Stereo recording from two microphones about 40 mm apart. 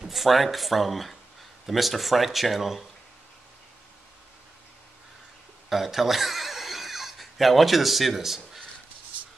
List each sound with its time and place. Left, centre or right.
0.0 s speech: centre
5.7 s neigh: centre